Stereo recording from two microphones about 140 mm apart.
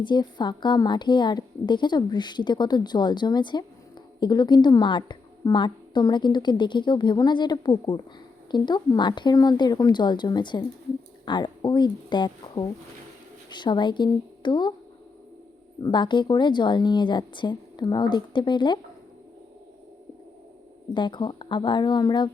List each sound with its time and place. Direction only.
0.0 s a woman's voice: 30° left (ahead or behind)
15.8 s a woman's voice: 35° left (ahead or behind)
20.9 s a woman's voice: 35° left (ahead or behind)